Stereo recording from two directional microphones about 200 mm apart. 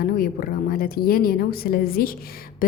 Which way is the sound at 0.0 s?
50° left (ahead or behind).